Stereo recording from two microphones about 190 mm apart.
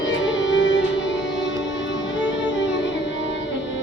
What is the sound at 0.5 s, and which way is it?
Music, 70° left (ahead or behind).